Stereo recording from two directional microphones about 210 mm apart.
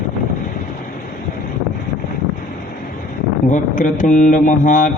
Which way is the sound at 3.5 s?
40° left (ahead or behind).